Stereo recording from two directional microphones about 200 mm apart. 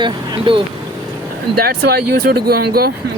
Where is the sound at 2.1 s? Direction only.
50° right (ahead or behind).